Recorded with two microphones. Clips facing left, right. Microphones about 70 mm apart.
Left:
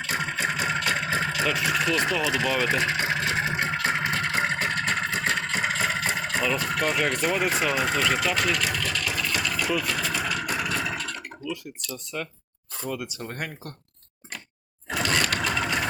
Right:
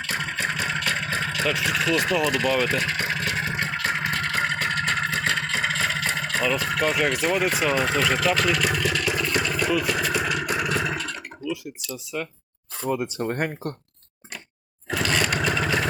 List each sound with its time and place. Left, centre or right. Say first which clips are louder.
0.1 s vehicle: even; centre
2.3 s speech: right 2 dB; centre
2.6 s vehicle: left 1 dB; centre
4.9 s vehicle: right 2 dB; centre
8.7 s vehicle: right 4 dB; centre
9.7 s vehicle: right 4 dB; centre
11.4 s speech: right 4 dB; centre
13.0 s speech: right 8 dB; right
14.8 s a sound: right 1 dB; centre
15.2 s vehicle: right 2 dB; centre